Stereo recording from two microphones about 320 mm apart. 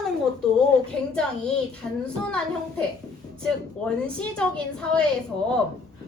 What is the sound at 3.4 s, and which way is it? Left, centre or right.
A woman's voice, centre.